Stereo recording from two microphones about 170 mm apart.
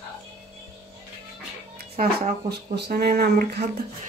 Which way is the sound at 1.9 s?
65° right (ahead or behind).